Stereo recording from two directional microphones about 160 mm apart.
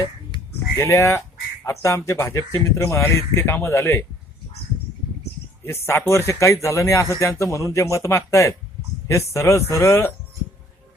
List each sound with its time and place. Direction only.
0.8 s speech: 20° left (ahead or behind)
5.6 s speech: 15° left (ahead or behind)